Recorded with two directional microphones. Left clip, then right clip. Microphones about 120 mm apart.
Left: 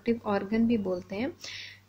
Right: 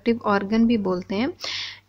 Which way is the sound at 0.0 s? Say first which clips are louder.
Right 7 dB; 35° right (ahead or behind).